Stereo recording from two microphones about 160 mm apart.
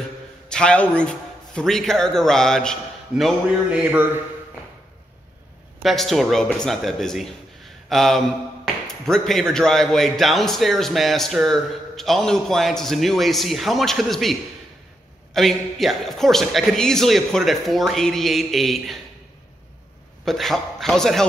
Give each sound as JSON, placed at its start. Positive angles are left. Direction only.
{"t": 0.5, "sound": "a man's voice", "side_deg": 5}
{"t": 5.8, "sound": "a man's voice", "side_deg": 0}
{"t": 15.3, "sound": "a man's voice", "side_deg": 0}
{"t": 20.2, "sound": "a man's voice", "side_deg": 0}